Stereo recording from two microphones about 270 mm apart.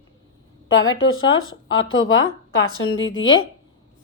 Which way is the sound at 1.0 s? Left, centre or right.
Left.